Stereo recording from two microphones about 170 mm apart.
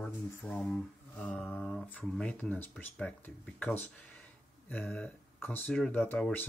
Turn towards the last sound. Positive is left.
turn(degrees=10)  # may be behind; listen again after turning